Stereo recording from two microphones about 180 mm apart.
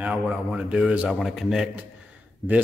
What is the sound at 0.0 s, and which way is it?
A man's voice, 5° right (ahead or behind).